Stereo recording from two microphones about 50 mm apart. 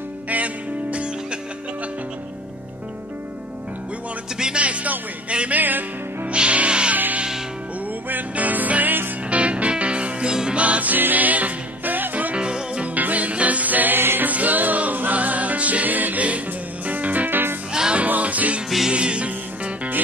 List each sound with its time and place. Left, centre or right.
0.3 s music: right
4.4 s music: centre
4.6 s speech: right
5.6 s music: right
6.3 s music: right
8.1 s music: right
9.3 s music: right
10.6 s music: right
12.4 s music: centre
12.9 s music: right
14.3 s music: right
17.7 s music: centre
18.0 s music: right